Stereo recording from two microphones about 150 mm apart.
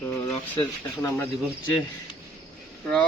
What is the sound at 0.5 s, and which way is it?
Speech, 35° left (ahead or behind).